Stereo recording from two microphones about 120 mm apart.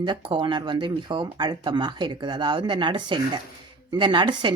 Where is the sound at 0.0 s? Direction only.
40° right (ahead or behind).